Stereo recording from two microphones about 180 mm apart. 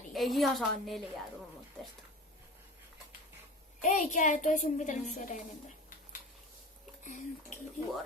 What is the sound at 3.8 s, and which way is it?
A woman's voice, 45° left (ahead or behind).